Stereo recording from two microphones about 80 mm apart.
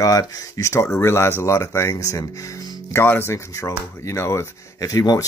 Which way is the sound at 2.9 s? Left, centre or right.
Left.